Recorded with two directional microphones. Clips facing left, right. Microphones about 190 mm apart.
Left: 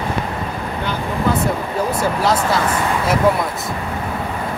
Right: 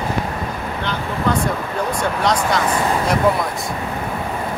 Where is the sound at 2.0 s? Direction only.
5° left (ahead or behind).